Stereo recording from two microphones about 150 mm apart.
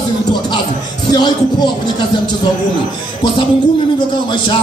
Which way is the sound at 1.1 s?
30° left (ahead or behind).